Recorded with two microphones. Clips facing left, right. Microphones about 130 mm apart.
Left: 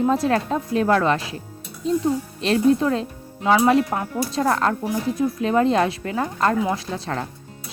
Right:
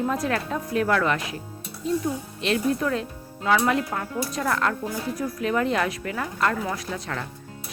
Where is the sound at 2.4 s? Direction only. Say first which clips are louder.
Left 6 dB; 30° left (ahead or behind).